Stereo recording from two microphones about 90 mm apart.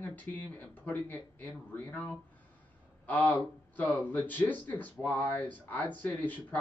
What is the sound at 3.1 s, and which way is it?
Speech, 15° left (ahead or behind).